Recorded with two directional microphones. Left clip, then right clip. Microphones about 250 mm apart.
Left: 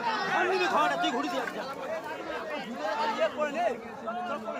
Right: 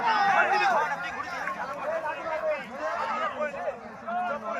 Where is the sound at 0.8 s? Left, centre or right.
Left.